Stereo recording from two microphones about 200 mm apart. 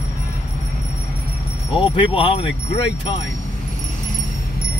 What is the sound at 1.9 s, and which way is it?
Speech, 25° left (ahead or behind).